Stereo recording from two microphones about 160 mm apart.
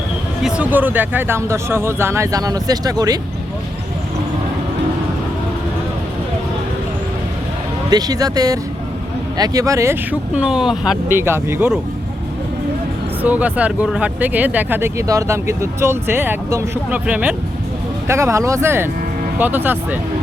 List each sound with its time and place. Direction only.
0.4 s speech: 5° right (ahead or behind); by 3.2 s 25° right (ahead or behind)
7.9 s speech: 25° right (ahead or behind); by 11.2 s 5° right (ahead or behind)
11.2 s speech: 15° right (ahead or behind)
13.2 s speech: 10° right (ahead or behind)